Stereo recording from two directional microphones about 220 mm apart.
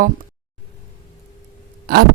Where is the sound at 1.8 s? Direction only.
45° right (ahead or behind).